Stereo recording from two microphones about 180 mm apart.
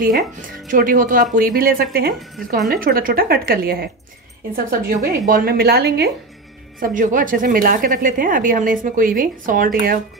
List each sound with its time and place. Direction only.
0.0 s a woman's voice: 50° right (ahead or behind); by 6.0 s 65° right (ahead or behind)
6.8 s a woman's voice: 45° right (ahead or behind)